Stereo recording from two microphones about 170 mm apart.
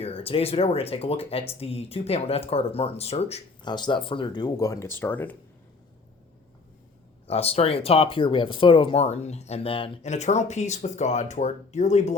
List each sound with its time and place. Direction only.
0.0 s speech: 35° left (ahead or behind)
3.6 s speech: 25° left (ahead or behind); by 5.4 s 10° left (ahead or behind)
7.3 s speech: 35° left (ahead or behind)